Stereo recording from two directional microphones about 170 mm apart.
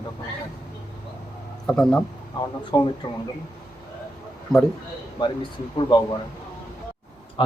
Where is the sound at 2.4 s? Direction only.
25° left (ahead or behind).